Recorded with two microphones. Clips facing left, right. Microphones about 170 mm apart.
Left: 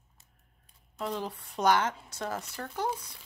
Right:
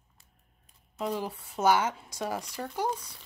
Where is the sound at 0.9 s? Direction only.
5° right (ahead or behind).